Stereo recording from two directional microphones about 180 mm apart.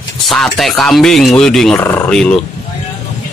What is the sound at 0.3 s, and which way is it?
Speech, centre (ahead or behind).